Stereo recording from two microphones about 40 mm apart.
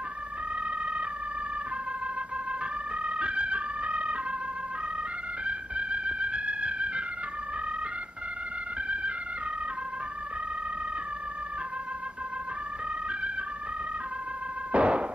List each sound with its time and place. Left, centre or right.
3.0 s organ: right
5.4 s music: right
8.8 s music: right
14.7 s knock: right